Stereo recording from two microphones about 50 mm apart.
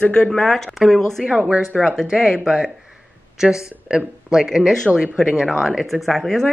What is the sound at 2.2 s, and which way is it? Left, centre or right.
Speech, centre.